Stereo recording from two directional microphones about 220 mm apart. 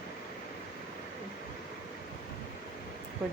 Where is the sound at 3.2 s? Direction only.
Centre (ahead or behind).